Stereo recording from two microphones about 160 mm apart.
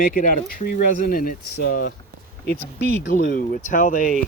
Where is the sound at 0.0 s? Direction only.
60° left (ahead or behind).